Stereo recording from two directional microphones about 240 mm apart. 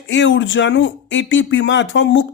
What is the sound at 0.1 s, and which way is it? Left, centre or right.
Speech, left.